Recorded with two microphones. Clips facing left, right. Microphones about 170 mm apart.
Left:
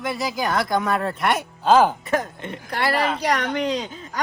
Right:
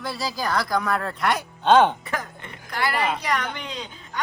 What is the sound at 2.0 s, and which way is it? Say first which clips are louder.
Speech: left 7 dB; 25° left (ahead or behind).